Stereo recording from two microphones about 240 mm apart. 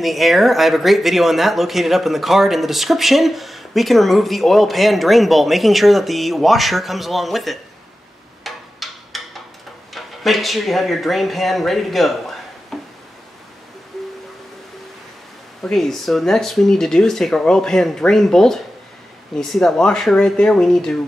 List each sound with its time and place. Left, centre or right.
0.0 s speech: centre
8.5 s a sound: centre
9.9 s speech: centre
12.7 s a sound: centre
13.9 s music: centre
15.6 s speech: centre